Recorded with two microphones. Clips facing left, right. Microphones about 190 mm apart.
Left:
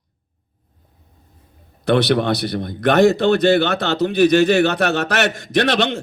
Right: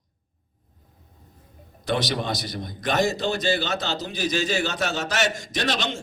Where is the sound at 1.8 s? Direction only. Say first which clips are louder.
Left 10 dB; 60° left (ahead or behind).